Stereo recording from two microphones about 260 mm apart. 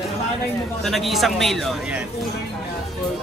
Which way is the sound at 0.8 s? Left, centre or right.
Centre.